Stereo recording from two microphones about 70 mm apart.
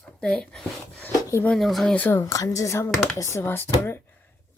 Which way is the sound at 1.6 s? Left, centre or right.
Centre.